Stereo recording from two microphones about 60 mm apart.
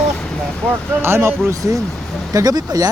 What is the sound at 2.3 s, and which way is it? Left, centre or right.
Speech, right.